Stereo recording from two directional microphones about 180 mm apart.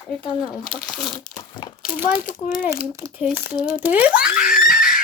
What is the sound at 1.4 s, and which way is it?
Crumpling, 25° left (ahead or behind).